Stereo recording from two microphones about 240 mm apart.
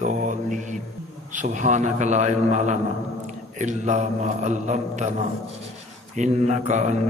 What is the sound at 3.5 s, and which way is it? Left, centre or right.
Mantra, right.